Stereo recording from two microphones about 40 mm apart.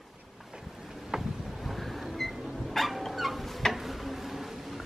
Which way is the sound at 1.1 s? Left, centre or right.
Centre.